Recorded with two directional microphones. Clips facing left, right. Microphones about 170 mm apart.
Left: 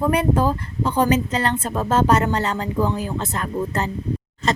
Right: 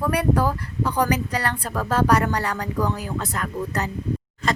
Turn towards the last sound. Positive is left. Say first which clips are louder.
# left 2 dB
turn(degrees=25)  # may be behind; listen again after turning